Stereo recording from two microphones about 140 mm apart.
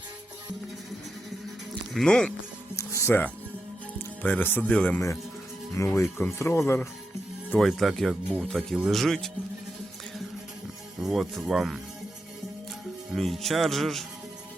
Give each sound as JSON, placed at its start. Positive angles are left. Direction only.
{"t": 1.9, "sound": "speech", "side_deg": 5}
{"t": 2.7, "sound": "music", "side_deg": 20}
{"t": 3.9, "sound": "speech", "side_deg": 10}
{"t": 5.7, "sound": "speech", "side_deg": 20}
{"t": 7.6, "sound": "speech", "side_deg": 0}
{"t": 11.0, "sound": "speech", "side_deg": 0}
{"t": 13.1, "sound": "speech", "side_deg": 0}